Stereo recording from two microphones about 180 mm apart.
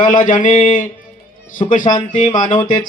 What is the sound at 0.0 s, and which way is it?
A man's voice, 45° left (ahead or behind).